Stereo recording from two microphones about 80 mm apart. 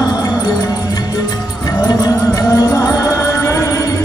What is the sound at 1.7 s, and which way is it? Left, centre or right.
Music, left.